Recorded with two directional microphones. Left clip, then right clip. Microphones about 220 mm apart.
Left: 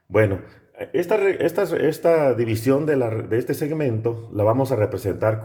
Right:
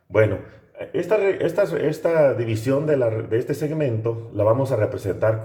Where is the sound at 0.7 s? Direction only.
55° left (ahead or behind).